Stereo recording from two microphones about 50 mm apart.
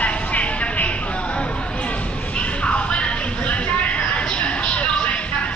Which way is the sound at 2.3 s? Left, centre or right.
Left.